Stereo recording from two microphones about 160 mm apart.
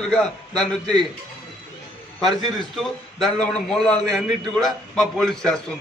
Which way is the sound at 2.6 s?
Centre (ahead or behind).